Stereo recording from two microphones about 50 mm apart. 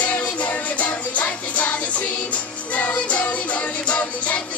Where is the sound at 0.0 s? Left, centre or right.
Left.